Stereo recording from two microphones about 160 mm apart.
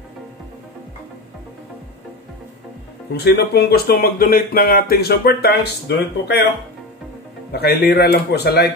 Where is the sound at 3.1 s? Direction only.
90° left.